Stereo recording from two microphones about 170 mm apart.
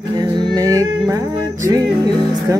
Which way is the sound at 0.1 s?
25° right (ahead or behind).